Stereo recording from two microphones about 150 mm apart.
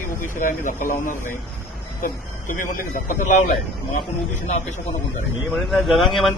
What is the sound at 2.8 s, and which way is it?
Speech, 65° left (ahead or behind).